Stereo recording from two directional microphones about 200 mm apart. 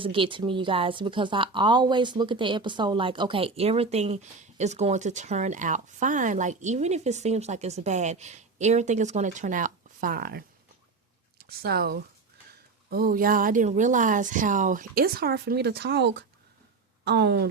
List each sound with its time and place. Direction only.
0.0 s a woman's voice: 25° right (ahead or behind); by 17.5 s 55° right (ahead or behind)